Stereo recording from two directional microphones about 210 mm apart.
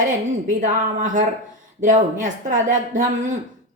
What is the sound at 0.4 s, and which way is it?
A woman's voice, 40° right (ahead or behind).